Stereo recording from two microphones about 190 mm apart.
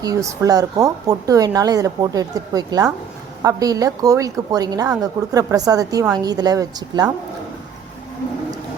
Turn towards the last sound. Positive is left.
turn(degrees=-20)  # may be behind; listen again after turning